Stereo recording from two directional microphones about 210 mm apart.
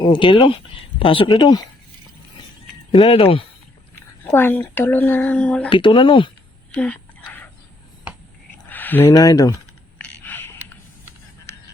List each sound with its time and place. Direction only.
0.0 s speech: 20° left (ahead or behind)
2.9 s speech: 25° left (ahead or behind)
4.2 s speech: 10° left (ahead or behind)
5.6 s speech: 25° left (ahead or behind)
6.7 s a sound: 5° left (ahead or behind)
8.7 s speech: 10° left (ahead or behind)
10.0 s a sound: 10° left (ahead or behind)